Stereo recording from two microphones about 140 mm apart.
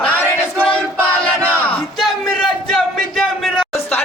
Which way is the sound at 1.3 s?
15° right (ahead or behind).